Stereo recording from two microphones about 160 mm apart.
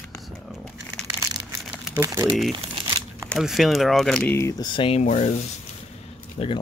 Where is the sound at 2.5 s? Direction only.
25° right (ahead or behind).